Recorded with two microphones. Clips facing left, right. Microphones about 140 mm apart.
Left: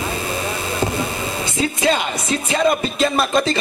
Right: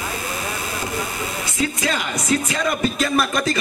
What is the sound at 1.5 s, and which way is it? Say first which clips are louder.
Speech: left 4 dB; 25° left (ahead or behind).